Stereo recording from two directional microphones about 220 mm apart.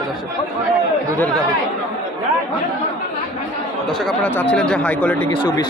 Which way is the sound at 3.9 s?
Centre (ahead or behind).